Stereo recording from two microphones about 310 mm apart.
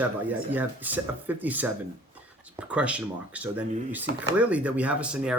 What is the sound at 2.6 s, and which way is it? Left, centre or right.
Speech, centre.